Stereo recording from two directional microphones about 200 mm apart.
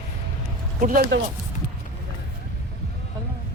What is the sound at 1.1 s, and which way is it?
Speech, 65° right (ahead or behind).